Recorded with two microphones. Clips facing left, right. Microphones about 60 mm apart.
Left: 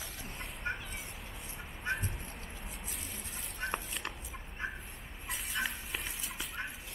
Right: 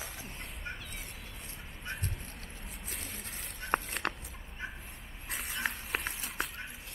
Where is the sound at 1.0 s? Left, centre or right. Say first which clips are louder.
Left 1 dB; centre.